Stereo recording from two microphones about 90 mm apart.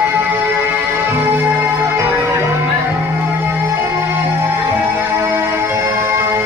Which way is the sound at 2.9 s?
20° right (ahead or behind).